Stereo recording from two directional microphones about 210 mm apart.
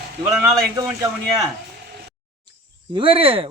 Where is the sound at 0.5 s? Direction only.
15° right (ahead or behind).